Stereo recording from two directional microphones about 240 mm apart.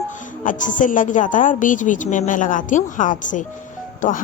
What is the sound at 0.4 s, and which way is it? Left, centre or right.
A woman's voice, left.